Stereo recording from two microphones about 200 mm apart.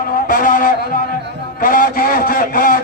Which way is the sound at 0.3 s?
45° left (ahead or behind).